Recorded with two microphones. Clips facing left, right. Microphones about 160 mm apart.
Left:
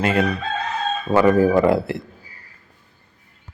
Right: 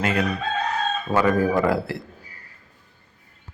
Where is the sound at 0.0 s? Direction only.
25° left (ahead or behind).